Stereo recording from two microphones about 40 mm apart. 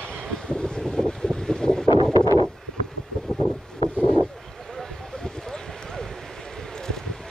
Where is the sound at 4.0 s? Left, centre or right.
Left.